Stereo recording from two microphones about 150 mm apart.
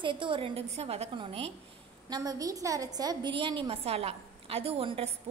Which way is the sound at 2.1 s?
25° right (ahead or behind).